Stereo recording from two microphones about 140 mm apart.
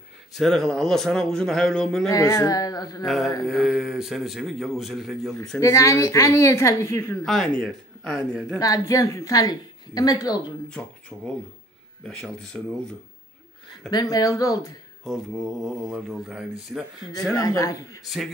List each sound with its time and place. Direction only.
0.3 s a man's voice: centre (ahead or behind)
2.0 s a woman's voice: 25° left (ahead or behind)
3.4 s a man's voice: 5° right (ahead or behind)
5.6 s a woman's voice: 20° left (ahead or behind)
7.2 s a man's voice: centre (ahead or behind)
8.5 s a woman's voice: 25° left (ahead or behind)
10.7 s speech: 5° left (ahead or behind)
13.8 s a woman's voice: 30° left (ahead or behind)
15.0 s a man's voice: centre (ahead or behind)
17.4 s a woman's voice: 25° left (ahead or behind)